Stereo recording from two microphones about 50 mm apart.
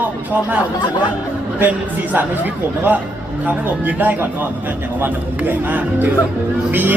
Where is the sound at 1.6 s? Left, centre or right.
Right.